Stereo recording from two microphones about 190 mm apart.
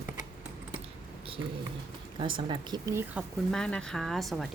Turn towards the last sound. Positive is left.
turn(degrees=0)  # may be behind; listen again after turning